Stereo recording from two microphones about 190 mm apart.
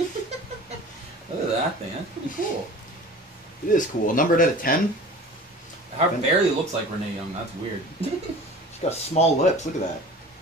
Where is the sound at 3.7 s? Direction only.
45° left (ahead or behind).